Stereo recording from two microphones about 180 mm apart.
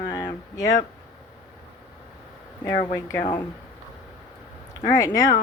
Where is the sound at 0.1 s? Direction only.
20° left (ahead or behind).